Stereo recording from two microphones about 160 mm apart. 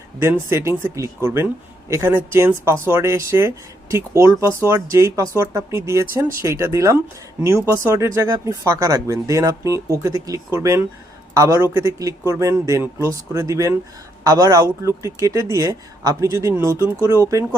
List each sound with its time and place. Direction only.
0.2 s speech: 15° right (ahead or behind)